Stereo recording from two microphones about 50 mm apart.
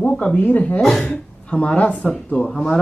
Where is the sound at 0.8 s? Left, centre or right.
Centre.